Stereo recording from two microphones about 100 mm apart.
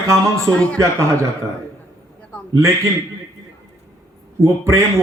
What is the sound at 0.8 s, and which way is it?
Speech, 30° right (ahead or behind).